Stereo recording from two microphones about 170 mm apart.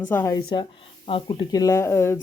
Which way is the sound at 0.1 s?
15° left (ahead or behind).